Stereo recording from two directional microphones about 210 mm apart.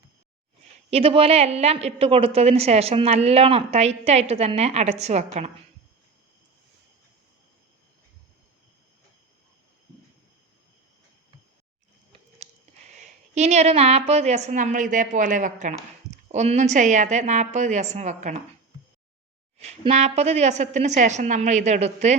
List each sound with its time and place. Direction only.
0.9 s a woman's voice: 25° right (ahead or behind)
12.4 s a sound: 35° right (ahead or behind)
14.1 s a woman's voice: 30° right (ahead or behind)
19.5 s a woman's voice: 30° right (ahead or behind)